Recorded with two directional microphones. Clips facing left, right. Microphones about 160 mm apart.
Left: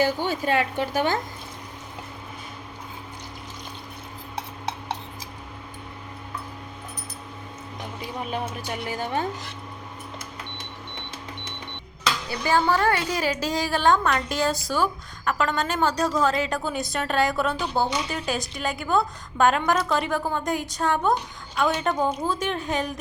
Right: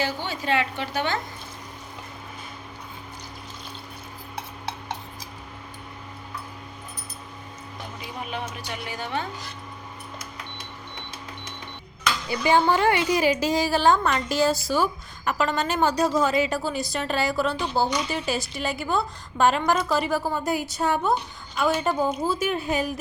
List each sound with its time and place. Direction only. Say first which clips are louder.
0.0 s a woman's voice: left 5 dB; 45° left (ahead or behind)
8.9 s a woman's voice: left 3 dB; 45° left (ahead or behind)
12.4 s a woman's voice: right 2 dB; 20° right (ahead or behind)